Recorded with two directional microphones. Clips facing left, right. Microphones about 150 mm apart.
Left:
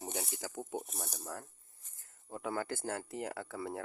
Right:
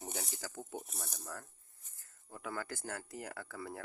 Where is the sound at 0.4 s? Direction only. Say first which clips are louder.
Left 4 dB; 20° left (ahead or behind).